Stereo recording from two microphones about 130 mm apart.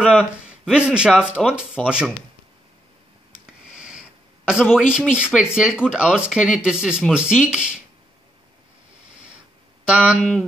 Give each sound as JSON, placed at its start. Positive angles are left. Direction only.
{"t": 0.2, "sound": "speech", "side_deg": -5}
{"t": 3.7, "sound": "a sound", "side_deg": -5}
{"t": 4.5, "sound": "speech", "side_deg": -5}
{"t": 9.8, "sound": "speech", "side_deg": -10}